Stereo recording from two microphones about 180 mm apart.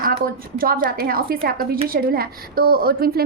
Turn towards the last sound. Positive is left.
turn(degrees=-60)  # may be behind; listen again after turning